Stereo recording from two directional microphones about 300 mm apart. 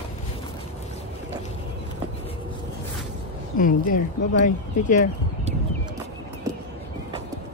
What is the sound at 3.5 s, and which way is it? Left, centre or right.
Speech, left.